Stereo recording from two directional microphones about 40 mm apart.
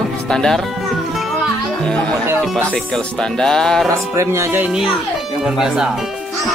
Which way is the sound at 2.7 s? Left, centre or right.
Centre.